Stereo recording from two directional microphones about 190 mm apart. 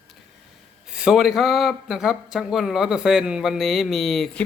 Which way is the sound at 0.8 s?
5° right (ahead or behind).